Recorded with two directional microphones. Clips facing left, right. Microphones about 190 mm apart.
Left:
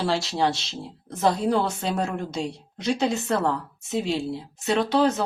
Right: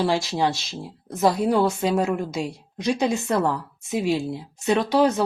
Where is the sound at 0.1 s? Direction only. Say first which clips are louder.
Right 1 dB; 15° right (ahead or behind).